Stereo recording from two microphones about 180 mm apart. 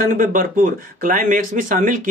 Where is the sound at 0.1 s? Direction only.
50° right (ahead or behind).